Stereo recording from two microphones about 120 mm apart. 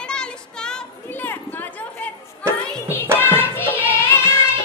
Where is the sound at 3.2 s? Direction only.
15° left (ahead or behind).